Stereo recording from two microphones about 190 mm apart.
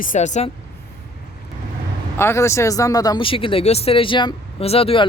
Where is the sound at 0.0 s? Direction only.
40° left (ahead or behind).